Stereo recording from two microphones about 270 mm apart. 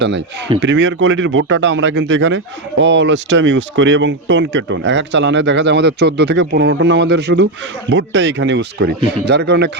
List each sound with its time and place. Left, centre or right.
0.0 s speech: right